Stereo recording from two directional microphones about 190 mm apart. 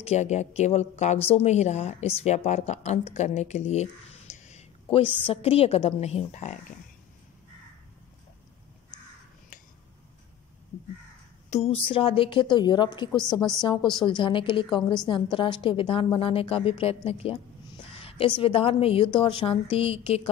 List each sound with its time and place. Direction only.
0.0 s a woman's voice: 35° left (ahead or behind)
11.5 s a woman's voice: 30° left (ahead or behind)